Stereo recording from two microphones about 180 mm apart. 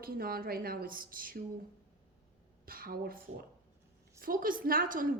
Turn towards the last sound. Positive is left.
turn(degrees=-50)  # may be behind; listen again after turning